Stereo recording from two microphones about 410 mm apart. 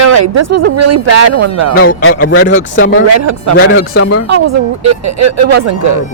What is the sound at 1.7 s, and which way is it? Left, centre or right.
Speech, left.